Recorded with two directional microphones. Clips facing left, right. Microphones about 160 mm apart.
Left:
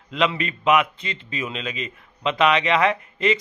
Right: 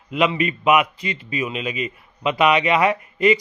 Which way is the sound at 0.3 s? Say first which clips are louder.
Right 2 dB; 10° right (ahead or behind).